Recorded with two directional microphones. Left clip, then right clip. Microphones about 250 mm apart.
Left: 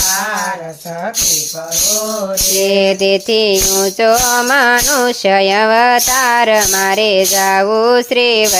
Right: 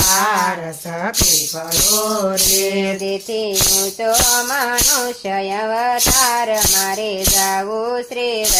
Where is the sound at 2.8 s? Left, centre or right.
Left.